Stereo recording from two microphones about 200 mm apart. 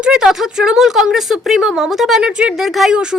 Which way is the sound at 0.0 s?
5° right (ahead or behind).